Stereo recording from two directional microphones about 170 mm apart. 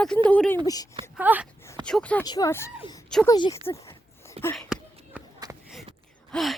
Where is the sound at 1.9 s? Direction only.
5° left (ahead or behind).